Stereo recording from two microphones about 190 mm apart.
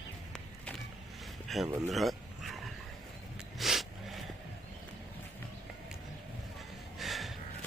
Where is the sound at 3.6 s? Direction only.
Centre (ahead or behind).